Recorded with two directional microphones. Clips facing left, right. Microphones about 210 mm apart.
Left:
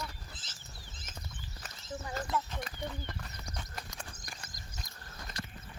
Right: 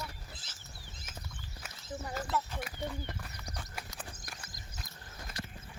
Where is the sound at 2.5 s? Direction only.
10° right (ahead or behind).